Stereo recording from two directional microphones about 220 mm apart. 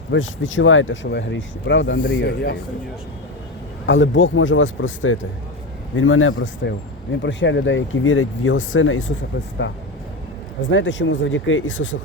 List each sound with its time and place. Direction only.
0.1 s speech: 60° left (ahead or behind)
3.8 s speech: 55° left (ahead or behind)